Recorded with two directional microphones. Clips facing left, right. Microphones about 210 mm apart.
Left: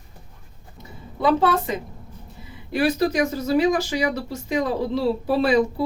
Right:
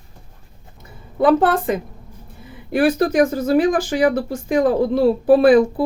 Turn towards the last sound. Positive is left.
turn(degrees=-50)  # may be behind; listen again after turning